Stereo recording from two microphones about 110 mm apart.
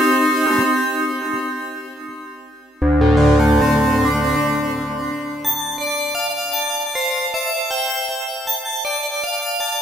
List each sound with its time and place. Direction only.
0.2 s music: centre (ahead or behind)
2.8 s music: centre (ahead or behind)